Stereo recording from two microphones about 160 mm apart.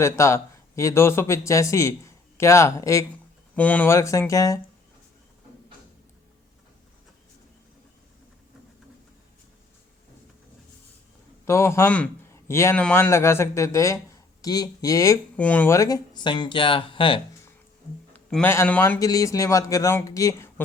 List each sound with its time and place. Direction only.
0.0 s speech: 20° left (ahead or behind)
11.4 s a man's voice: 15° left (ahead or behind)
15.4 s speech: 10° left (ahead or behind); by 17.2 s 30° left (ahead or behind)
18.1 s a sound: 10° left (ahead or behind)
18.5 s speech: 15° left (ahead or behind)